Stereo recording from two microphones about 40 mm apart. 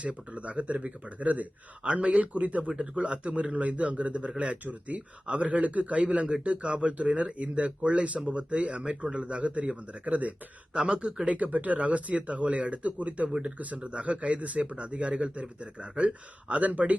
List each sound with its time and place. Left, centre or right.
0.0 s speech: right
1.8 s speech: right
2.6 s speech: centre
3.0 s speech: right